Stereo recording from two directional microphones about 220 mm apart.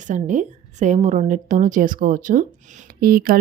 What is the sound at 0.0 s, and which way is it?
A woman's voice, 35° right (ahead or behind).